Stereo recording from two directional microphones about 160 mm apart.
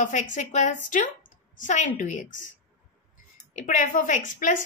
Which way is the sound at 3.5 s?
55° left (ahead or behind).